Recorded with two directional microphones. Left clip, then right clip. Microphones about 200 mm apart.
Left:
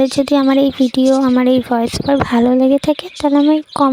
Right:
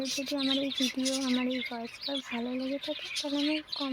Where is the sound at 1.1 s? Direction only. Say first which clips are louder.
Left 19 dB; 45° left (ahead or behind).